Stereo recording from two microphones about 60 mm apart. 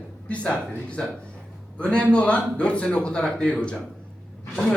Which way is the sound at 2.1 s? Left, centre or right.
Centre.